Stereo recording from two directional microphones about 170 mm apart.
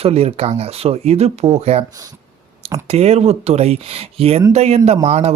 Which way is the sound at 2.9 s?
40° right (ahead or behind).